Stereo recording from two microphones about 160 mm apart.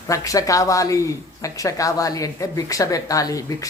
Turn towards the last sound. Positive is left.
turn(degrees=20)  # may be behind; listen again after turning